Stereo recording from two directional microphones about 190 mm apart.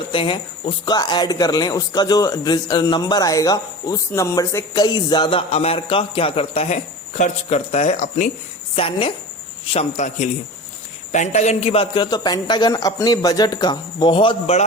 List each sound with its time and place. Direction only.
0.1 s speech: 25° left (ahead or behind)
8.7 s a man's voice: 30° left (ahead or behind)